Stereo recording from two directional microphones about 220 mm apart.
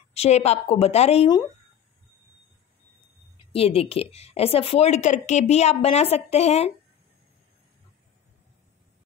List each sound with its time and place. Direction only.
0.1 s a woman's voice: 30° left (ahead or behind)
3.5 s a woman's voice: 25° left (ahead or behind)